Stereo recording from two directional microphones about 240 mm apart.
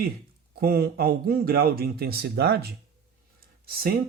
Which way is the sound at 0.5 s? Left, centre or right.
Right.